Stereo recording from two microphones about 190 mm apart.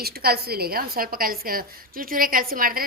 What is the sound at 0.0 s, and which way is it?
A woman's voice, 55° right (ahead or behind).